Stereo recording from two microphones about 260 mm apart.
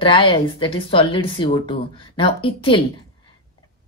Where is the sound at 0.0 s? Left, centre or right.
Centre.